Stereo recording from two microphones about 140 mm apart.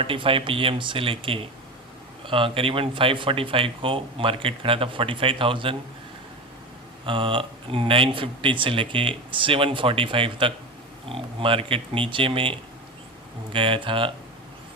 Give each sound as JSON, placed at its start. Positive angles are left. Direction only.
{"t": 0.0, "sound": "speech", "side_deg": -40}
{"t": 7.0, "sound": "speech", "side_deg": -40}